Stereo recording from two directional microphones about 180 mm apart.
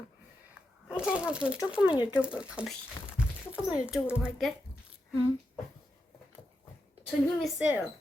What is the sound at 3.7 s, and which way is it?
Speech, 5° right (ahead or behind).